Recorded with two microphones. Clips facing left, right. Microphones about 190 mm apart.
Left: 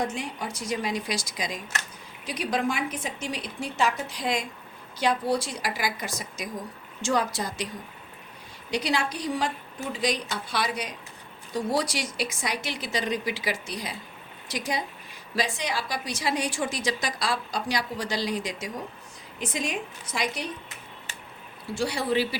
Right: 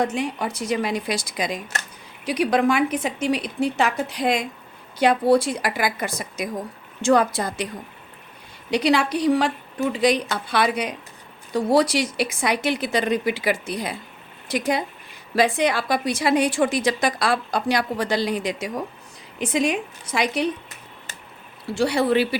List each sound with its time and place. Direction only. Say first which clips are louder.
0.0 s a woman's voice: right 7 dB; 65° right (ahead or behind)
2.2 s a woman's voice: right 8 dB; 70° right (ahead or behind)
8.7 s a woman's voice: right 8 dB; 65° right (ahead or behind)
20.4 s a woman's voice: right 11 dB; 65° right (ahead or behind)
21.8 s a woman's voice: right 7 dB; 65° right (ahead or behind)